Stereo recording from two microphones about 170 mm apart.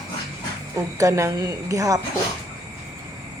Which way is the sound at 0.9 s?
20° right (ahead or behind).